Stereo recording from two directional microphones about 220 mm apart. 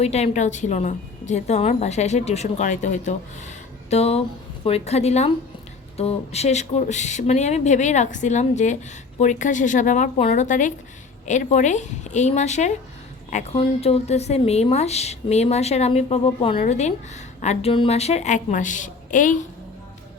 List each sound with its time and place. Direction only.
0.0 s a woman's voice: 30° left (ahead or behind)